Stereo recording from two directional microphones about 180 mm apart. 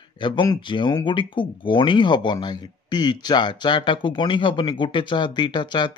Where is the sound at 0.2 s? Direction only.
25° left (ahead or behind).